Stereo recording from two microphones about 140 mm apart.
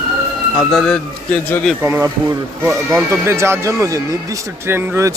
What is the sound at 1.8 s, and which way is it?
Speech, 15° right (ahead or behind).